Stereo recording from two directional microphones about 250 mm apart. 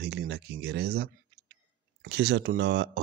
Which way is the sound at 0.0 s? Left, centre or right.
Right.